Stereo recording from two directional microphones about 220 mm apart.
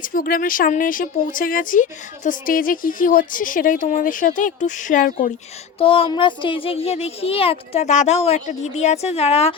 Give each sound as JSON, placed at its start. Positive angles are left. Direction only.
{"t": 0.0, "sound": "speech", "side_deg": 40}
{"t": 5.8, "sound": "speech", "side_deg": 25}